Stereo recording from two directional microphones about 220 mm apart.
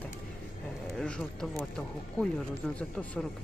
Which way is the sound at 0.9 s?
5° left (ahead or behind).